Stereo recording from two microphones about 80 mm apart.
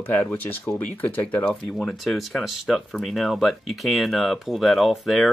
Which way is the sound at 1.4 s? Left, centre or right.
Centre.